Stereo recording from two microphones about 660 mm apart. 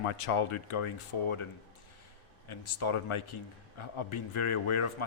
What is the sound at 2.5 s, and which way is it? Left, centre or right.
A man's voice, left.